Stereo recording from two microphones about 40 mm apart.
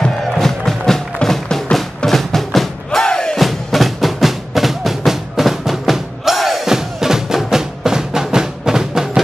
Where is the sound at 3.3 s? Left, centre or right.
Centre.